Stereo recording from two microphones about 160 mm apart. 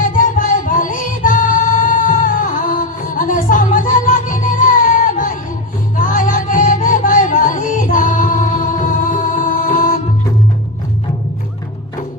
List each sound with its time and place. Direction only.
0.2 s music: 55° left (ahead or behind)